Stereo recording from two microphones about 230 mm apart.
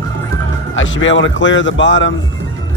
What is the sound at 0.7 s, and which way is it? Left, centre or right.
Speech, left.